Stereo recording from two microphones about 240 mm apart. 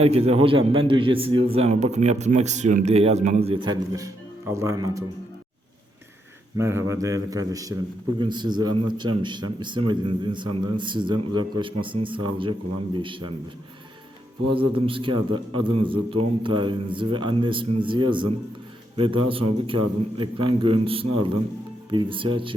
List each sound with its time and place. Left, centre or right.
0.0 s a man's voice: right
6.6 s a man's voice: centre
14.5 s a man's voice: right